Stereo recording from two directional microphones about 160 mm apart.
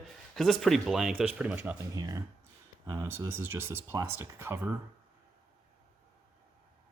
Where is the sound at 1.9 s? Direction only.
20° right (ahead or behind).